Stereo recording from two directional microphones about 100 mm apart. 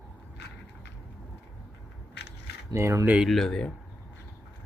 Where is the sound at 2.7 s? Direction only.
30° right (ahead or behind).